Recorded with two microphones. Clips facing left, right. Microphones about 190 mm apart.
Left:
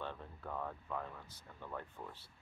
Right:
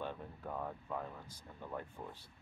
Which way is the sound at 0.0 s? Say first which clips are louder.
Right 2 dB; 15° right (ahead or behind).